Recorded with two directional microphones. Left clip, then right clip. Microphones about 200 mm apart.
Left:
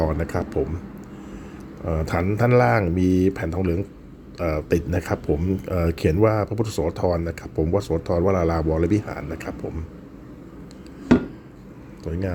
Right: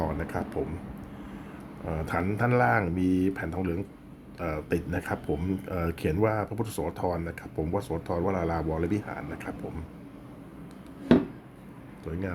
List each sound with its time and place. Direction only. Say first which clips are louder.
0.0 s speech: left 7 dB; 20° left (ahead or behind)
1.8 s speech: left 6 dB; 15° left (ahead or behind)
12.1 s speech: left 6 dB; 15° left (ahead or behind)